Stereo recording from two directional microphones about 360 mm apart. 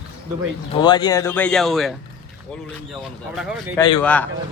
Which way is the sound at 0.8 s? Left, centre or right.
Centre.